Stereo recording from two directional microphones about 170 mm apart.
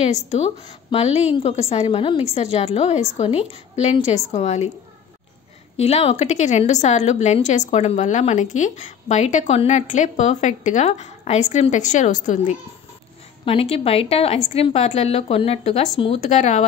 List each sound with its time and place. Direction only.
0.0 s a woman's voice: 40° left (ahead or behind)
5.8 s a woman's voice: 40° left (ahead or behind)
13.5 s a woman's voice: 35° left (ahead or behind)